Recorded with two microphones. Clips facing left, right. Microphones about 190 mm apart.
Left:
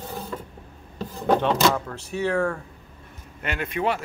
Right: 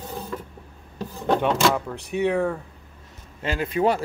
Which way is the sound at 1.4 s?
Centre (ahead or behind).